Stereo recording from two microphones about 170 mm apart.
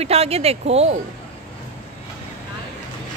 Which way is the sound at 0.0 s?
35° right (ahead or behind).